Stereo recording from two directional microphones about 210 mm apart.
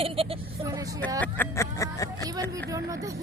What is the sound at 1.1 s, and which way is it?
Speech, 10° left (ahead or behind).